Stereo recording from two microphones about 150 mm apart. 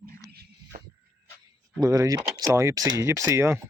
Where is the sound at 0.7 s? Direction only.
70° right (ahead or behind).